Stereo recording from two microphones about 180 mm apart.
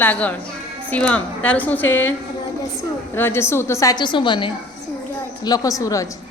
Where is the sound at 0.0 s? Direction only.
10° left (ahead or behind).